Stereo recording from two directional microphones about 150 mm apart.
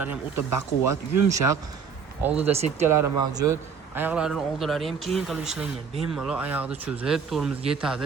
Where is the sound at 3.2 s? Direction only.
25° right (ahead or behind).